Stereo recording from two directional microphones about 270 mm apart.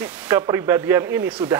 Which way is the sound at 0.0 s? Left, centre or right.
Centre.